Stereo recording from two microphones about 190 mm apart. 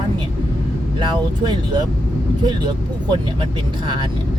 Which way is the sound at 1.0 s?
25° right (ahead or behind).